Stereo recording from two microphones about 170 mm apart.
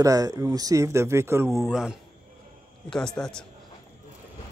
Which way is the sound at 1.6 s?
5° right (ahead or behind).